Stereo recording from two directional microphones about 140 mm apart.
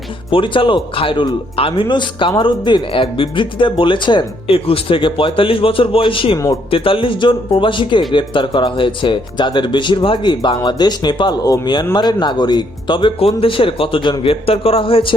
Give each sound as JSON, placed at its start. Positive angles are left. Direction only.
{"t": 0.3, "sound": "speech", "side_deg": 35}